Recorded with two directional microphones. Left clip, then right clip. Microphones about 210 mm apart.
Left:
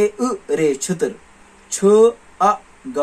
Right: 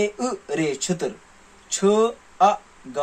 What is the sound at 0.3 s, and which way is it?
Speech, 35° right (ahead or behind).